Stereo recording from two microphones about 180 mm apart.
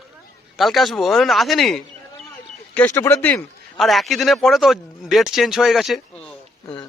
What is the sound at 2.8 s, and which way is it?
A man's voice, 15° left (ahead or behind).